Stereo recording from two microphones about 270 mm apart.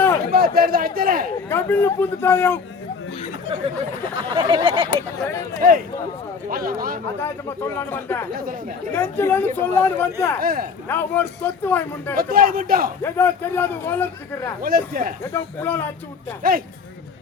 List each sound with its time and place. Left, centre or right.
0.3 s speech: right
1.5 s a man's voice: centre
4.4 s a sound: centre
5.5 s a man's voice: right
7.6 s a man's voice: centre
10.4 s a man's voice: right
10.8 s a man's voice: centre
12.1 s a man's voice: right
13.0 s a man's voice: centre
14.6 s a man's voice: right
15.3 s a man's voice: centre
16.4 s a man's voice: right